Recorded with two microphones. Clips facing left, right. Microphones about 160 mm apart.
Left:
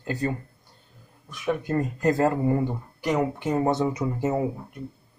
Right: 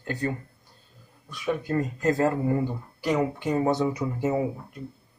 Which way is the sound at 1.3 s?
20° left (ahead or behind).